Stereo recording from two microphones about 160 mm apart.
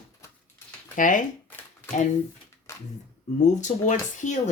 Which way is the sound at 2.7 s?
20° left (ahead or behind).